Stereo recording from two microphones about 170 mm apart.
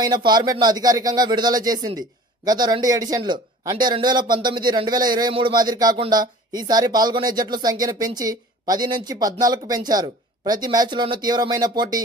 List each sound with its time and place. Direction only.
0.0 s a man's voice: 25° right (ahead or behind)